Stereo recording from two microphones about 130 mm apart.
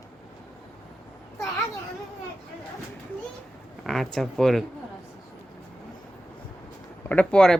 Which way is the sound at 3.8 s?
Centre (ahead or behind).